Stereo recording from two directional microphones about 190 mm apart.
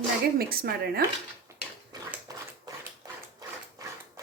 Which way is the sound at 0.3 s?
50° right (ahead or behind).